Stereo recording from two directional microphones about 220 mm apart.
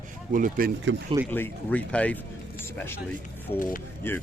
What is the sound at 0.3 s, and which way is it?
Speech, 40° right (ahead or behind).